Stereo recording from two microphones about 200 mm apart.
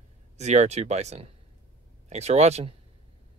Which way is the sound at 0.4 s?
35° right (ahead or behind).